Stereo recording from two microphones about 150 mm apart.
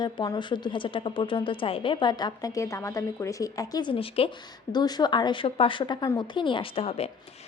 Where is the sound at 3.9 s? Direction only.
35° left (ahead or behind).